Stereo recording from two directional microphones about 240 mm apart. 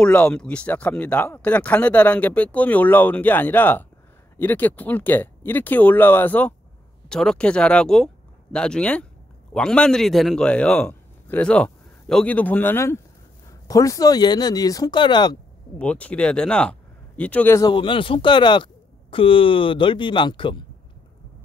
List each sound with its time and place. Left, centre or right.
0.0 s a man's voice: centre
15.8 s speech: centre